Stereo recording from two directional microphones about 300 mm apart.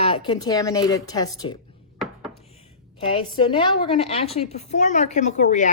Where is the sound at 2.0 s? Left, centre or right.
Centre.